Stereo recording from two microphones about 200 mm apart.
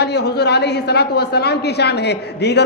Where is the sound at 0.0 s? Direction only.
55° left (ahead or behind).